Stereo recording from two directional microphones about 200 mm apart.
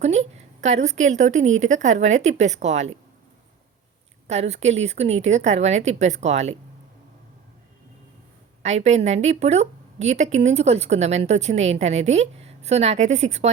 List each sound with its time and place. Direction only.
0.0 s a woman's voice: 35° right (ahead or behind)
4.3 s a woman's voice: 35° right (ahead or behind)
8.6 s a woman's voice: 35° right (ahead or behind)